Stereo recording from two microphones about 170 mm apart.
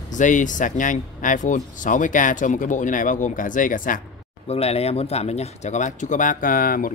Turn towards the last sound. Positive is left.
turn(degrees=55)  # may be behind; listen again after turning